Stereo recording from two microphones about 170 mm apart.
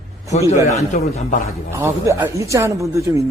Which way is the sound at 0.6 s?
45° left (ahead or behind).